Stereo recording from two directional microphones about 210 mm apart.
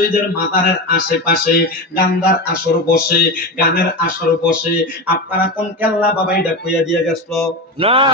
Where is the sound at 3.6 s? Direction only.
50° left (ahead or behind).